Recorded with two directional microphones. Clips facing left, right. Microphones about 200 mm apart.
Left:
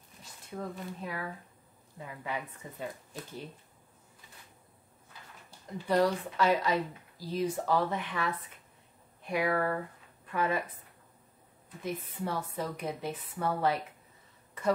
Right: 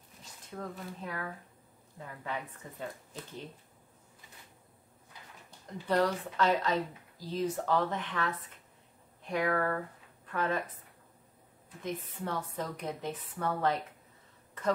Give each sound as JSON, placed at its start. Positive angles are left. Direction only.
{"t": 0.5, "sound": "speech", "side_deg": 10}
{"t": 5.9, "sound": "speech", "side_deg": 10}
{"t": 11.8, "sound": "speech", "side_deg": 10}